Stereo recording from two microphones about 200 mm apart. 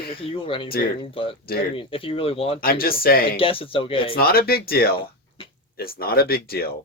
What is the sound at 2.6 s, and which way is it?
Speech, 50° left (ahead or behind).